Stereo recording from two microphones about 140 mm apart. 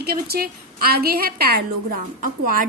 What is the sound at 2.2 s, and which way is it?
Speech, 80° right.